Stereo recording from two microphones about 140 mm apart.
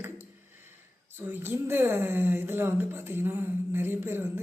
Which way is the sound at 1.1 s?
15° right (ahead or behind).